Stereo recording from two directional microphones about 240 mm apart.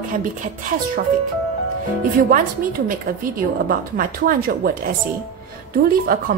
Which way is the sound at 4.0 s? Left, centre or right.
Right.